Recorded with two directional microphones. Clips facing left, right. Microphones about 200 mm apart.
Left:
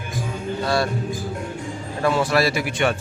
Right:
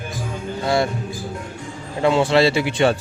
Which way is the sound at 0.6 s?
20° right (ahead or behind).